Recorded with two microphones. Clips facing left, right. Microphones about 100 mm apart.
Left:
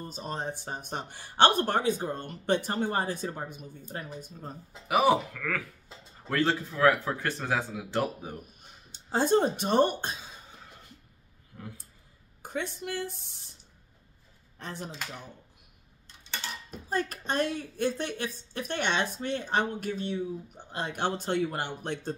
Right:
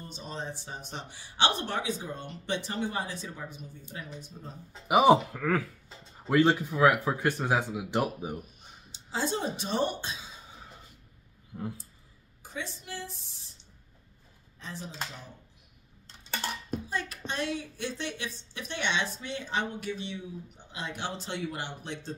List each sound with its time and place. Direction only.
0.0 s a woman's voice: 45° left (ahead or behind)
4.8 s speech: 20° right (ahead or behind)
6.2 s speech: 15° right (ahead or behind)
8.9 s speech: 50° left (ahead or behind)
11.5 s a sound: 15° right (ahead or behind)
12.4 s a woman's voice: 55° left (ahead or behind)
14.6 s speech: 55° left (ahead or behind)
16.4 s a child's voice: 50° right (ahead or behind)
16.9 s a woman's voice: 45° left (ahead or behind)